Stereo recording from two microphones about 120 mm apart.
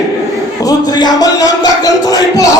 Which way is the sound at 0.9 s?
35° left (ahead or behind).